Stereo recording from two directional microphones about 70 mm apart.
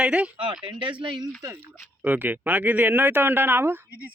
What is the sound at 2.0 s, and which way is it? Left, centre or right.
Speech, right.